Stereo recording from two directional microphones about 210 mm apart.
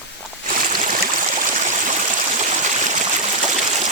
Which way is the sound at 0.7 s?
40° right (ahead or behind).